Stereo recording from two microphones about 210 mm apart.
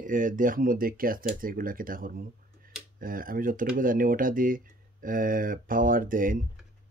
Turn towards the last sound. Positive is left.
turn(degrees=-40)  # may be behind; listen again after turning